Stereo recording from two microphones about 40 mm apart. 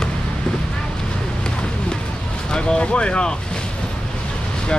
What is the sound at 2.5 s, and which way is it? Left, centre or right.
Speech, left.